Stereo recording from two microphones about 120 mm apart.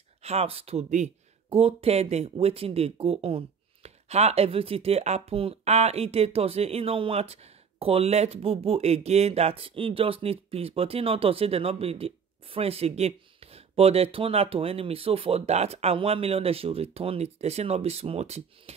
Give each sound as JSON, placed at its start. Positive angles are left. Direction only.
{"t": 0.2, "sound": "speech", "side_deg": -60}